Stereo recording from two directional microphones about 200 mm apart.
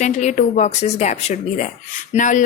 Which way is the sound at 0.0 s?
35° left (ahead or behind).